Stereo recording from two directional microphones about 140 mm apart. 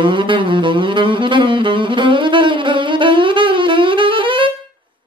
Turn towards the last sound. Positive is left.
turn(degrees=-35)  # may be behind; listen again after turning